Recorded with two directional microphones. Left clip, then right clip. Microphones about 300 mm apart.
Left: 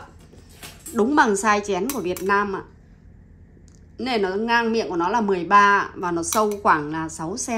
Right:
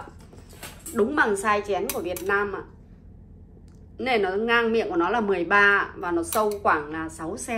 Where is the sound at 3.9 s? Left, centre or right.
Centre.